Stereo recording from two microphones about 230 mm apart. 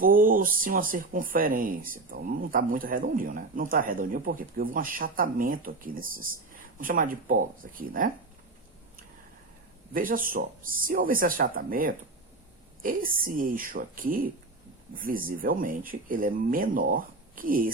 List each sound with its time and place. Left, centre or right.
0.0 s speech: right
9.9 s a woman's voice: right